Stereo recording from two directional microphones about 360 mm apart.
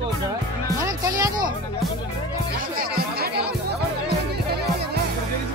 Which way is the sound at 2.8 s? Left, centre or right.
Right.